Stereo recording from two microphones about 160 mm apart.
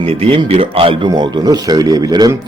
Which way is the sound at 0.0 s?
35° right (ahead or behind).